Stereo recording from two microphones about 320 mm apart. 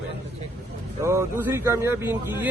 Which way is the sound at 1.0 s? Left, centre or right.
Centre.